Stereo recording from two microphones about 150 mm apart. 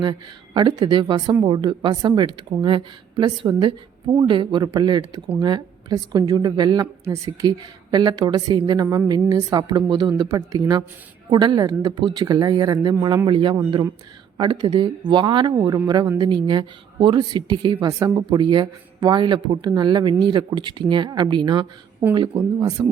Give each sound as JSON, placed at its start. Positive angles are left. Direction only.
{"t": 0.0, "sound": "a woman's voice", "side_deg": -30}